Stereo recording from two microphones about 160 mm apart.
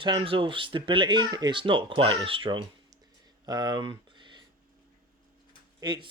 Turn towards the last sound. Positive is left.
turn(degrees=-25)  # may be behind; listen again after turning